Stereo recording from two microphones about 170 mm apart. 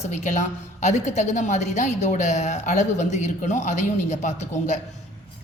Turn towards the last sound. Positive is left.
turn(degrees=45)  # may be behind; listen again after turning